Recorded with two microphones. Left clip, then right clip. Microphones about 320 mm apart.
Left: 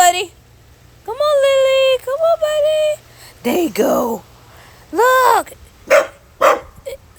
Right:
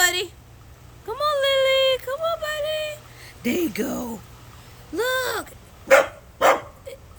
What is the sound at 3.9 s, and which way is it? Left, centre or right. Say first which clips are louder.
Speech: left 15 dB; left.